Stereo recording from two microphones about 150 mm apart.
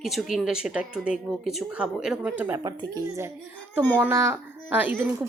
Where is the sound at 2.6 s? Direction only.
25° right (ahead or behind).